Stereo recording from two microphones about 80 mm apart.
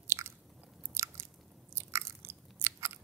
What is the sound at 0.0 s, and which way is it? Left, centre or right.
Biting, right.